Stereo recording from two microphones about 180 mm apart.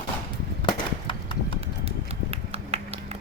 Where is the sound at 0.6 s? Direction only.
25° left (ahead or behind).